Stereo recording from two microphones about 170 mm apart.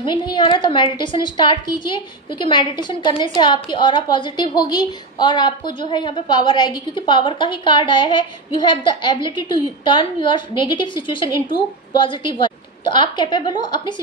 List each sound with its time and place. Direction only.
0.0 s a woman's voice: 25° left (ahead or behind)